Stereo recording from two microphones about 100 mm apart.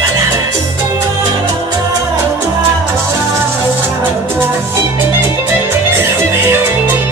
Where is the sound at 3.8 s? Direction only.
20° right (ahead or behind).